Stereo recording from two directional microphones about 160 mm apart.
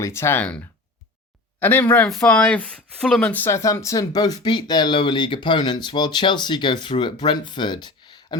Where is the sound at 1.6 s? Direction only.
10° left (ahead or behind).